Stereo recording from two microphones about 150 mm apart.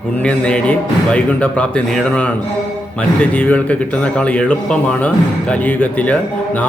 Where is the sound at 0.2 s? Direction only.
5° left (ahead or behind).